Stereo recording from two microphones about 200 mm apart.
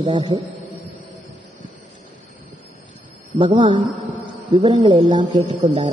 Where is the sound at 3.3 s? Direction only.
25° right (ahead or behind).